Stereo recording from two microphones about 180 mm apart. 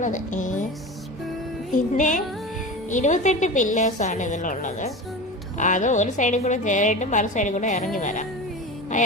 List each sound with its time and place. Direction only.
0.0 s speech: 45° left (ahead or behind)
1.7 s a woman's voice: 45° left (ahead or behind)